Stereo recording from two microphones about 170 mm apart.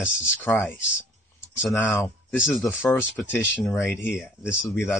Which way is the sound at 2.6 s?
15° left (ahead or behind).